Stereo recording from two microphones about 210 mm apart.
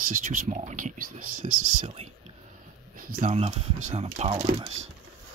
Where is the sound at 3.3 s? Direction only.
30° right (ahead or behind).